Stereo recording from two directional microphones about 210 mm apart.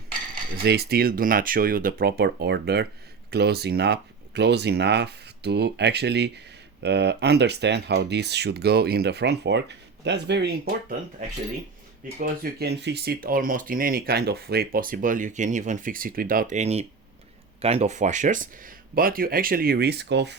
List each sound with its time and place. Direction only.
0.5 s speech: 50° right (ahead or behind)
12.2 s speech: 45° right (ahead or behind)